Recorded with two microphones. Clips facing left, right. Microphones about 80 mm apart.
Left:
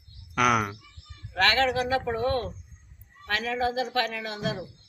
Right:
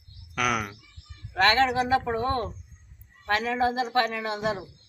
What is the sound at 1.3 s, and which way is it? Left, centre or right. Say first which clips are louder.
Speech: right 2 dB; right.